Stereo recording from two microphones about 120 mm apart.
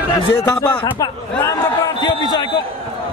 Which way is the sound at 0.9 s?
30° left (ahead or behind).